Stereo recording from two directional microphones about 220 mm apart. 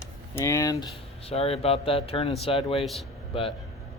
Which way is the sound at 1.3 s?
25° left (ahead or behind).